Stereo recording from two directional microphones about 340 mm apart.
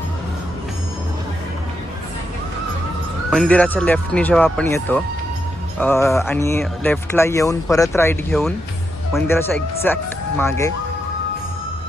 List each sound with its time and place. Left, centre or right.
3.3 s speech: centre